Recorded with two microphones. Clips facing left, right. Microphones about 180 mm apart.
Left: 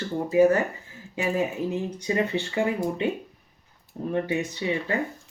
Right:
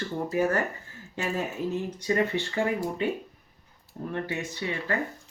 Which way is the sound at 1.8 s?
15° left (ahead or behind).